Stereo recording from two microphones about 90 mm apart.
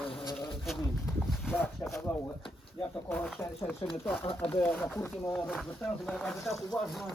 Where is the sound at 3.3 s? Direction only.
25° left (ahead or behind).